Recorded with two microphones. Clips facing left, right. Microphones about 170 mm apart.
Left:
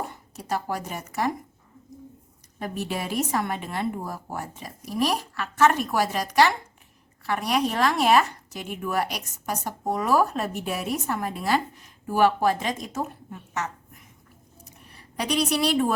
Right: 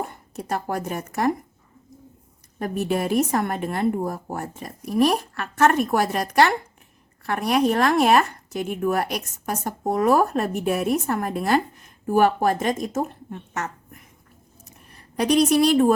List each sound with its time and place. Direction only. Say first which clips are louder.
0.0 s speech: right 4 dB; 55° right (ahead or behind)
2.6 s speech: right 6 dB; 50° right (ahead or behind)
13.5 s a sound: even; 50° right (ahead or behind)